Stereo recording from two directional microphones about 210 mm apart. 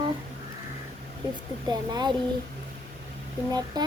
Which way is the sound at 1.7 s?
20° right (ahead or behind).